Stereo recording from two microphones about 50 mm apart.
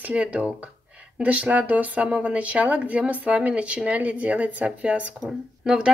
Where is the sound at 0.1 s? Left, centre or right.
Right.